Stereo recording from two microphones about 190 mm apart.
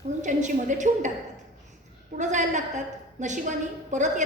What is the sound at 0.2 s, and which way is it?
Speech, 40° right (ahead or behind).